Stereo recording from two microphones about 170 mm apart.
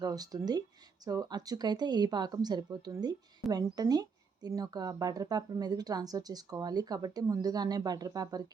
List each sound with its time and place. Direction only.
0.0 s speech: 20° right (ahead or behind)